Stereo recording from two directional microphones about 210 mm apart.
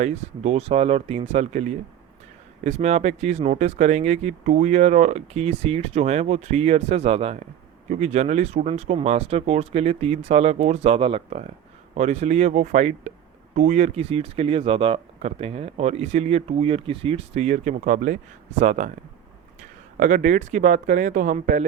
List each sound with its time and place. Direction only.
0.0 s speech: 30° right (ahead or behind)
20.0 s speech: 40° right (ahead or behind)